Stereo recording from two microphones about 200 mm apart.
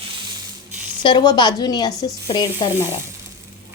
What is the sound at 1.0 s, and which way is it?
Speech, 20° left (ahead or behind).